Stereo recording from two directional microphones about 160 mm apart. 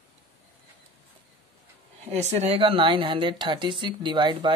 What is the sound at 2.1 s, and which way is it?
Speech, 45° right (ahead or behind).